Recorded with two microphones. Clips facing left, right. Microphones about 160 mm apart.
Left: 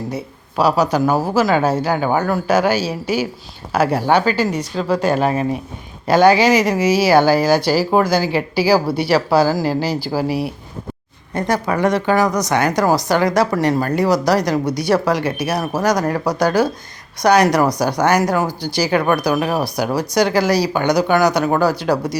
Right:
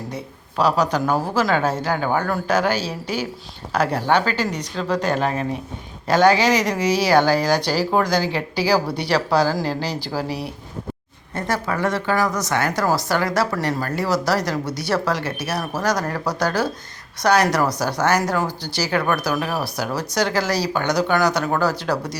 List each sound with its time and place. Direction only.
0.1 s speech: 10° left (ahead or behind)